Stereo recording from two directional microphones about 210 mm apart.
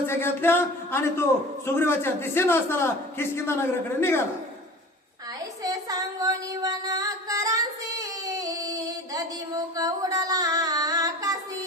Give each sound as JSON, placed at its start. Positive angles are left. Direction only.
{"t": 0.1, "sound": "a man's voice", "side_deg": 10}
{"t": 5.6, "sound": "music", "side_deg": -15}
{"t": 9.7, "sound": "female singing", "side_deg": -15}